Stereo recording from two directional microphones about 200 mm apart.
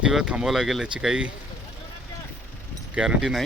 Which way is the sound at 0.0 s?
5° right (ahead or behind).